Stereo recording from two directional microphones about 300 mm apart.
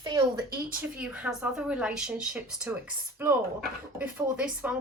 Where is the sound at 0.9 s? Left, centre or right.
Centre.